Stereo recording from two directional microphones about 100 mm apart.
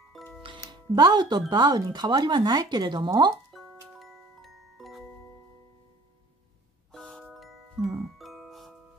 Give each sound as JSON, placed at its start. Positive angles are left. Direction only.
{"t": 0.2, "sound": "music", "side_deg": 0}
{"t": 0.7, "sound": "speech", "side_deg": -45}
{"t": 3.5, "sound": "glockenspiel", "side_deg": 0}
{"t": 6.9, "sound": "music", "side_deg": 5}